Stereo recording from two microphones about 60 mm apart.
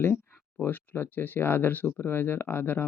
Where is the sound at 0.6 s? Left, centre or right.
Left.